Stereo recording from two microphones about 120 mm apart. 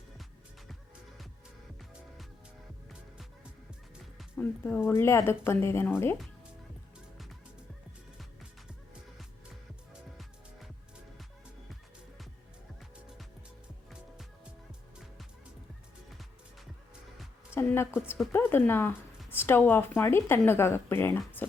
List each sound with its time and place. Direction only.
4.4 s speech: 15° left (ahead or behind)
17.5 s a sound: 20° left (ahead or behind)
18.3 s speech: 20° left (ahead or behind)